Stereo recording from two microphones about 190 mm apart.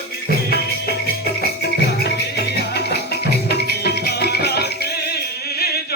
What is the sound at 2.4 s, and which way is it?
Music, 60° left (ahead or behind).